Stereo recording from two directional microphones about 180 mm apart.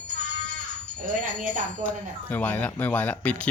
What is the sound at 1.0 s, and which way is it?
Speech, 45° right (ahead or behind).